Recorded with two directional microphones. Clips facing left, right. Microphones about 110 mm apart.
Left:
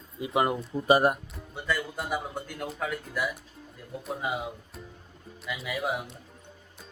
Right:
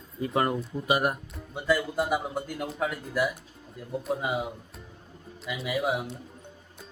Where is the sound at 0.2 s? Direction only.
15° left (ahead or behind).